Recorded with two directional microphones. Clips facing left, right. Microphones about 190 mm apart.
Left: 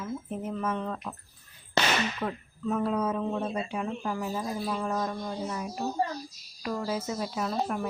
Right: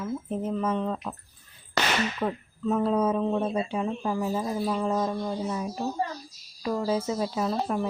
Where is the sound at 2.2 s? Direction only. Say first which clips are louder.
Right 4 dB; 20° right (ahead or behind).